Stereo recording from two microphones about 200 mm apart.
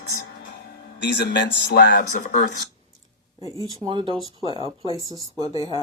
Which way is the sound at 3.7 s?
25° right (ahead or behind).